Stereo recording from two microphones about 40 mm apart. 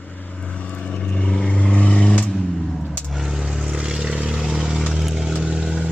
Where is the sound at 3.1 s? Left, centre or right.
Centre.